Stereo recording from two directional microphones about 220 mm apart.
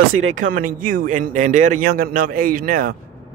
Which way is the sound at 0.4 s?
40° right (ahead or behind).